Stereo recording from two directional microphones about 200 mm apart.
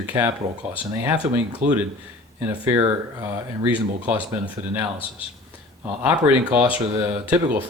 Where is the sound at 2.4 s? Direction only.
10° right (ahead or behind).